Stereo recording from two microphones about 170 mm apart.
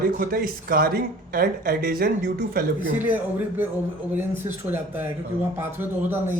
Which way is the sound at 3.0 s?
10° right (ahead or behind).